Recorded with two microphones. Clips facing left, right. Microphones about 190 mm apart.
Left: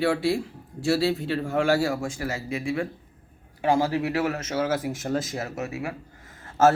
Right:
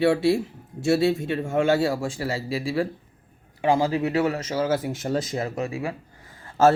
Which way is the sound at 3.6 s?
15° right (ahead or behind).